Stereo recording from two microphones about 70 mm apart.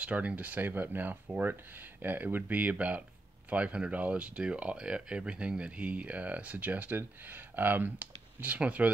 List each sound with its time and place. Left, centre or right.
0.0 s speech: centre